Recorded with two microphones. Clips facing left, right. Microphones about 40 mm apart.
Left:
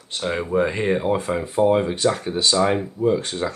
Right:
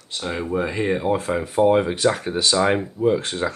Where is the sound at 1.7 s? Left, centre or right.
Centre.